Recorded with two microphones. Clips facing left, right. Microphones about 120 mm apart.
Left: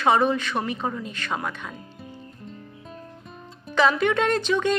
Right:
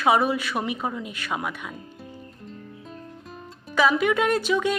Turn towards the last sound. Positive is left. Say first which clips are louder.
# left 1 dB
turn(degrees=-5)  # may be behind; listen again after turning